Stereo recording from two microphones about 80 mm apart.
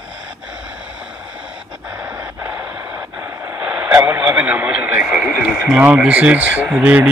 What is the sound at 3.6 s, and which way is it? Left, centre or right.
Radio, centre.